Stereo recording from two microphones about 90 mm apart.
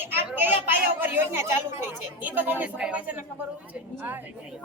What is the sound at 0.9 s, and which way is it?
A woman's voice, 25° right (ahead or behind).